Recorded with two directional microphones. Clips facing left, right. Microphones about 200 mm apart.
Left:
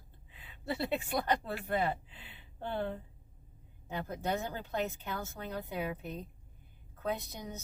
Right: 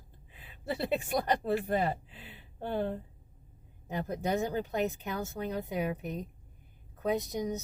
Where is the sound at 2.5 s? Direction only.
15° right (ahead or behind).